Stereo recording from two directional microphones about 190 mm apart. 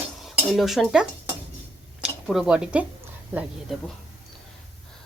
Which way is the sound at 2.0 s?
Centre (ahead or behind).